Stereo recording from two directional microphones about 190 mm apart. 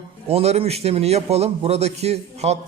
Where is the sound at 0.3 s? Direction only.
30° right (ahead or behind).